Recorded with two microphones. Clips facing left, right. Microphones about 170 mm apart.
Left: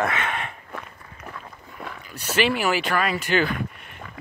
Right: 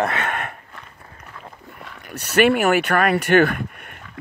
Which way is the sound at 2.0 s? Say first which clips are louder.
Right 6 dB; 65° right (ahead or behind).